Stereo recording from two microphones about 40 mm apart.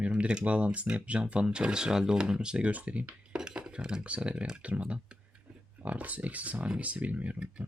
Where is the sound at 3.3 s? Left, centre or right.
Right.